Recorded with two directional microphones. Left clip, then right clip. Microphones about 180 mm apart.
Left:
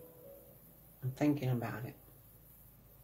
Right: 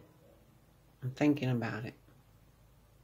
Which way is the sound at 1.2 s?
45° right (ahead or behind).